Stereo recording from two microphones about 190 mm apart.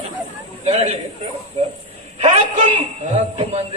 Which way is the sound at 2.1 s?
35° right (ahead or behind).